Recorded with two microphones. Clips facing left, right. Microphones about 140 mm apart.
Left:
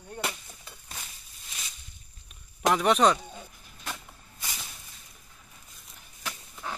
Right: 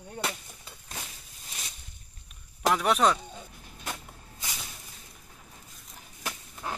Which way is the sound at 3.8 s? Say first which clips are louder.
Right 1 dB; 15° right (ahead or behind).